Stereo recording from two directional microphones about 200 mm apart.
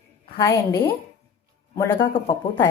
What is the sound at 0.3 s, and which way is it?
A woman's voice, 15° left (ahead or behind).